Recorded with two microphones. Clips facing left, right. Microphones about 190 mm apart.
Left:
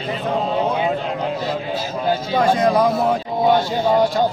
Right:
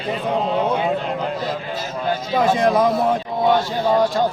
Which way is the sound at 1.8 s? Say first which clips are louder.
Left 2 dB; 30° left (ahead or behind).